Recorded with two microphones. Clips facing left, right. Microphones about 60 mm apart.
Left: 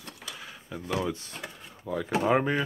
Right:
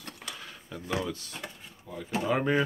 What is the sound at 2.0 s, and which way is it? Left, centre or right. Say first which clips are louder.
Speech: left 4 dB; left.